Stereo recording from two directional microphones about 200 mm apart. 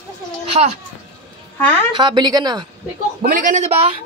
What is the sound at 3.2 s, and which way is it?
Speech, 40° right (ahead or behind).